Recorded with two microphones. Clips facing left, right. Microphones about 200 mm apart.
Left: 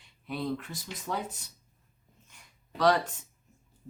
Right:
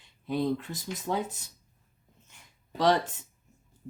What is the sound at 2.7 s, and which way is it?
Speech, 25° right (ahead or behind).